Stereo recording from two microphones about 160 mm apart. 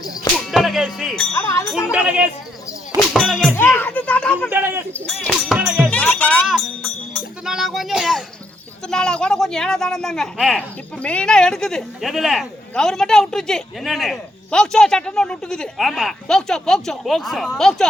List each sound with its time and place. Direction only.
0.3 s music: centre (ahead or behind)
1.4 s speech: 15° left (ahead or behind)
1.9 s speech: 10° right (ahead or behind)
3.5 s speech: 15° left (ahead or behind)
4.4 s a sound: 15° right (ahead or behind)
4.9 s music: 5° left (ahead or behind)
5.5 s music: 5° right (ahead or behind)
5.9 s music: 10° left (ahead or behind)
7.4 s a sound: 5° right (ahead or behind)
8.9 s speech: 5° left (ahead or behind)